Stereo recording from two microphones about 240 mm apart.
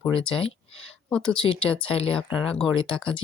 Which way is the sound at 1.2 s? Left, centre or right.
Left.